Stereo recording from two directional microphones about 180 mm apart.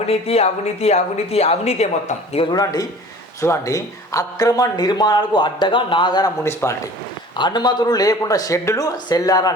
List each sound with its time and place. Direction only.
0.1 s speech: 35° left (ahead or behind)
2.5 s speech: 20° left (ahead or behind)
7.3 s speech: 25° left (ahead or behind)